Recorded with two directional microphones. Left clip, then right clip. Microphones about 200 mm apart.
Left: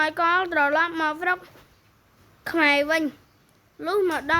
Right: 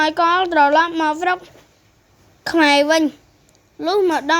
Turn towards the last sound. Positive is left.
turn(degrees=-20)  # may be behind; listen again after turning